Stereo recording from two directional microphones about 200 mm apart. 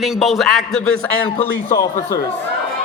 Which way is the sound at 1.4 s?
20° left (ahead or behind).